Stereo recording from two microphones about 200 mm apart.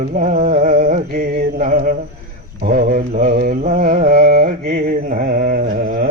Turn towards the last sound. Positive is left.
turn(degrees=-50)  # may be behind; listen again after turning